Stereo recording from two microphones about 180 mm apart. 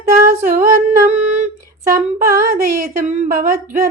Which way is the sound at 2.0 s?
50° right (ahead or behind).